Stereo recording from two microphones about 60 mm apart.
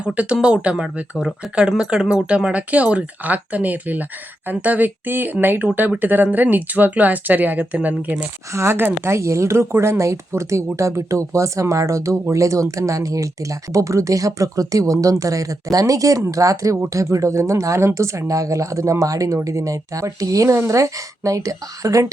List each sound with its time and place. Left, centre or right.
0.0 s speech: centre
8.5 s speech: right